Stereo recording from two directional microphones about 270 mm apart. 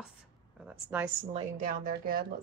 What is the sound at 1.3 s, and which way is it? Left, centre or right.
Speech, right.